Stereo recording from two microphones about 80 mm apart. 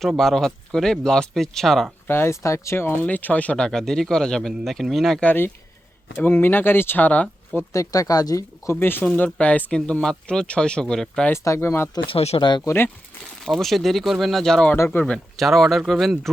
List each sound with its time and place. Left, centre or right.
0.0 s speech: centre
2.0 s speech: left
3.7 s speech: centre
5.2 s speech: left
7.7 s speech: left
8.7 s speech: left; by 11.3 s centre
11.3 s speech: left
12.0 s speech: left
12.6 s speech: left
13.4 s speech: centre